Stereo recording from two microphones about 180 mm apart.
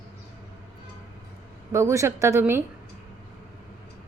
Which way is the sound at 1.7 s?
15° right (ahead or behind).